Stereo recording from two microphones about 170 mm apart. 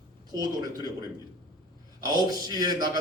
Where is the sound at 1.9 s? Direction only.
25° right (ahead or behind).